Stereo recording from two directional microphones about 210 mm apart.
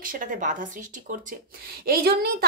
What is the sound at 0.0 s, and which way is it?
A woman's voice, 40° right (ahead or behind).